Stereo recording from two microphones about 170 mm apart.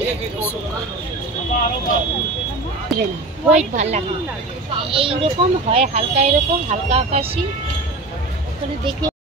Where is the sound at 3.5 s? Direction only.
40° right (ahead or behind).